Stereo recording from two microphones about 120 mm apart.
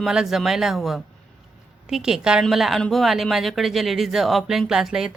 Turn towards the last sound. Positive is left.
turn(degrees=-5)  # may be behind; listen again after turning